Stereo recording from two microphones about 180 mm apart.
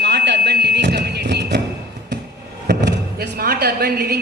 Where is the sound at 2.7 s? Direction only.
70° right (ahead or behind).